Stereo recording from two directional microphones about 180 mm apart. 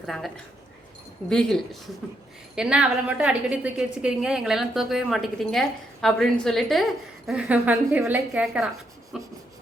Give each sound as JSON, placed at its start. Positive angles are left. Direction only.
{"t": 0.0, "sound": "a woman's voice", "side_deg": 0}